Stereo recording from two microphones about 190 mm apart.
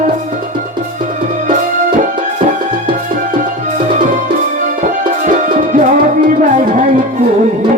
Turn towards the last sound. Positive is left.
turn(degrees=-45)  # may be behind; listen again after turning